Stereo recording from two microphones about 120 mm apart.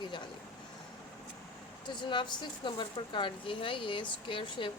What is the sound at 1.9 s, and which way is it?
Speech, 40° left (ahead or behind).